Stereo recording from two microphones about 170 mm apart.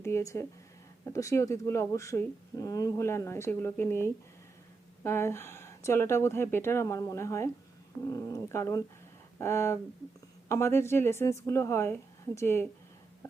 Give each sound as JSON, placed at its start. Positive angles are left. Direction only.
{"t": 0.0, "sound": "speech", "side_deg": 15}